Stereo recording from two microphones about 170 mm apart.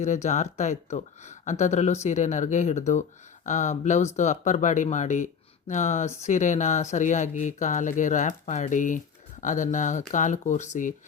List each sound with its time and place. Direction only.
0.0 s speech: 45° left (ahead or behind)